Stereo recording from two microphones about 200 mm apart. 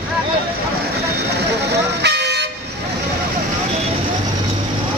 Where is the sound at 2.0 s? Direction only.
55° right (ahead or behind).